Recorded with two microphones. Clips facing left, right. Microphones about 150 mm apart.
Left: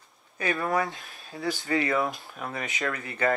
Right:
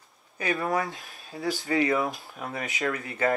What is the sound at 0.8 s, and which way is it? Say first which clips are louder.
Speech: even; centre (ahead or behind).